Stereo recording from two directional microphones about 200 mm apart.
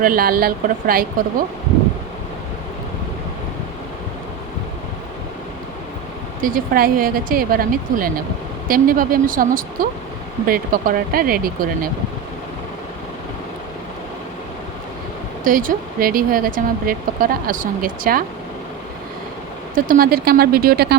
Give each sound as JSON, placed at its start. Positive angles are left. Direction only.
{"t": 0.0, "sound": "speech", "side_deg": -45}
{"t": 6.4, "sound": "speech", "side_deg": -45}
{"t": 15.4, "sound": "speech", "side_deg": -45}
{"t": 19.7, "sound": "speech", "side_deg": -45}